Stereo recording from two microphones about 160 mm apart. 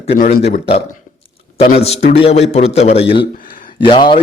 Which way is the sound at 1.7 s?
40° left (ahead or behind).